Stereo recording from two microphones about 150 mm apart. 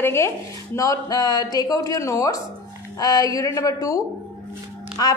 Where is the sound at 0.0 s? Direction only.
15° left (ahead or behind).